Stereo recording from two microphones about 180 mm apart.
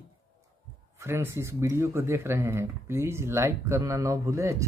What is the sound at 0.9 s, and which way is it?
Speech, 15° right (ahead or behind).